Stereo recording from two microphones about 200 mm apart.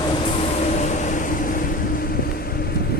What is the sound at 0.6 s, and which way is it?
Vehicle, 35° left (ahead or behind).